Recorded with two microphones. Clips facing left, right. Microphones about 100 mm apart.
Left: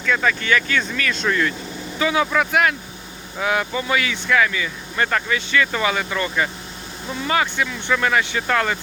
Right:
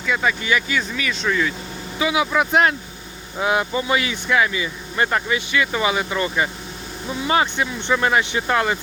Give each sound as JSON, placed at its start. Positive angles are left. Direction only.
{"t": 0.0, "sound": "speech", "side_deg": -10}
{"t": 2.5, "sound": "speech", "side_deg": -30}